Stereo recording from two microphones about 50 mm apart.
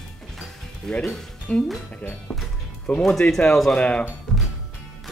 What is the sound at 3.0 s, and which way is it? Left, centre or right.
Speech, centre.